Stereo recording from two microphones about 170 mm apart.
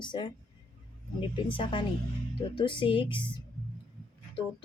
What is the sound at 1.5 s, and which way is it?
A woman's voice, 30° left (ahead or behind).